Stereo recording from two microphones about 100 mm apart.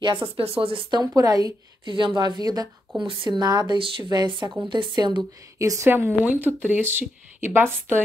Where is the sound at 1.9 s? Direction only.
50° right (ahead or behind).